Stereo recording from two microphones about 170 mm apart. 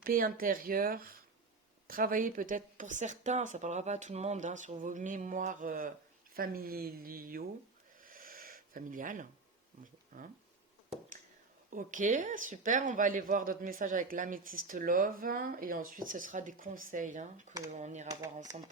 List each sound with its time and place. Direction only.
0.0 s a woman's voice: 55° right (ahead or behind)
8.0 s a sound: 55° right (ahead or behind)
10.1 s a woman's voice: 55° right (ahead or behind)
11.7 s a woman's voice: 50° right (ahead or behind)